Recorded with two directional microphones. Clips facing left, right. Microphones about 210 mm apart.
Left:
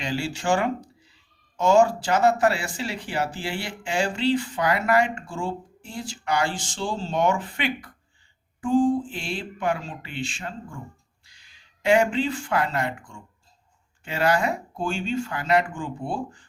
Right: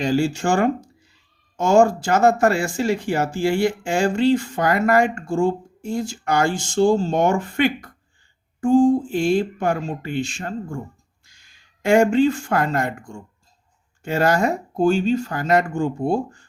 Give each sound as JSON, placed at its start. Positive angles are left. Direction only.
{"t": 0.0, "sound": "speech", "side_deg": -45}